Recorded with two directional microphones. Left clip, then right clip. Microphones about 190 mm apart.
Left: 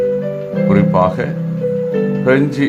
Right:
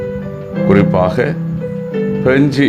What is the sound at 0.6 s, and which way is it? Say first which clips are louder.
Speech: right 2 dB; 20° right (ahead or behind).